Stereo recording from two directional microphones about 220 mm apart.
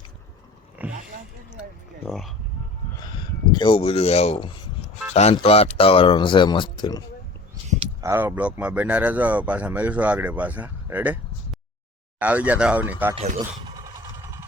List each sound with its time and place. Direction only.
0.8 s a sound: 5° right (ahead or behind)
2.0 s speech: centre (ahead or behind)
3.0 s speech: 20° left (ahead or behind)
8.0 s speech: 10° right (ahead or behind)
12.2 s speech: 5° right (ahead or behind)